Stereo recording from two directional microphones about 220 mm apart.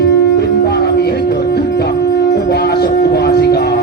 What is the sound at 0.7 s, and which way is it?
Music, 45° left (ahead or behind).